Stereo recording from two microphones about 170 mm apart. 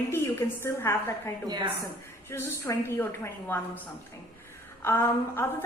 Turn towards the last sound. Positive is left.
turn(degrees=15)  # may be behind; listen again after turning